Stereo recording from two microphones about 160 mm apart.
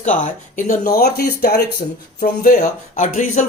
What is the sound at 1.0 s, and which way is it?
Speech, 85° left.